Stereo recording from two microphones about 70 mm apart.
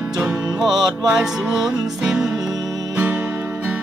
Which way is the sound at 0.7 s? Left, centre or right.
Right.